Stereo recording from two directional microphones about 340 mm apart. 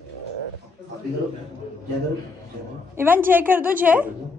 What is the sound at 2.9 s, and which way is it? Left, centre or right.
A woman's voice, centre.